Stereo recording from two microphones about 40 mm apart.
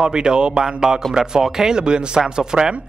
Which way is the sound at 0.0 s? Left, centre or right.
Centre.